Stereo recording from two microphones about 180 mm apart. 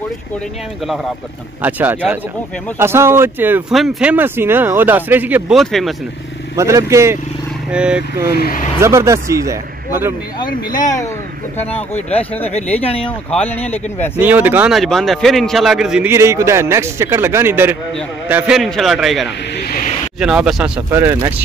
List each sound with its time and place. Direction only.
1.6 s a man's voice: 10° right (ahead or behind)
6.5 s a man's voice: 15° right (ahead or behind)
7.7 s a man's voice: 5° right (ahead or behind)
8.4 s speech: 55° left (ahead or behind)
8.7 s a man's voice: 15° right (ahead or behind)
10.7 s speech: 45° left (ahead or behind)
11.9 s speech: 10° left (ahead or behind)
12.7 s speech: 35° left (ahead or behind)
13.3 s speech: 10° left (ahead or behind)
14.2 s a man's voice: 10° right (ahead or behind)
18.3 s a man's voice: centre (ahead or behind)